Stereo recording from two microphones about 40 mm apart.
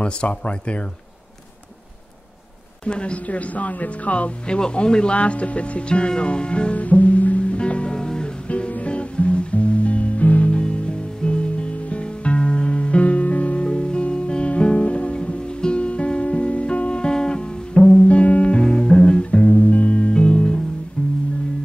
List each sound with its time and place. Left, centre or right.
0.0 s speech: left
2.8 s speech: left
4.5 s speech: left
8.5 s music: left
10.5 s music: left
13.7 s music: left
18.0 s music: left